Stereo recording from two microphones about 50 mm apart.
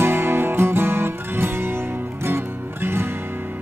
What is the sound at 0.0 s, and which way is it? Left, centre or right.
Music, right.